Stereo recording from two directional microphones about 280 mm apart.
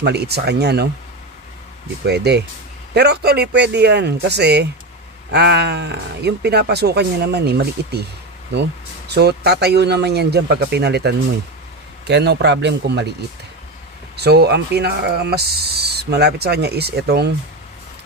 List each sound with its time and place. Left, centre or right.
0.0 s speech: right
2.0 s speech: right
9.1 s speech: right
14.1 s speech: right